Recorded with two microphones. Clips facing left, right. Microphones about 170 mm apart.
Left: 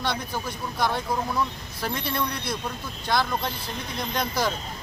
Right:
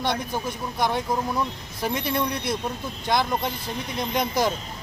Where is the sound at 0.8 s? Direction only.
20° right (ahead or behind).